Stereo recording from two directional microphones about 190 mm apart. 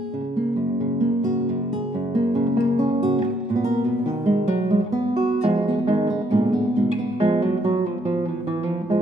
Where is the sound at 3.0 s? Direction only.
35° right (ahead or behind).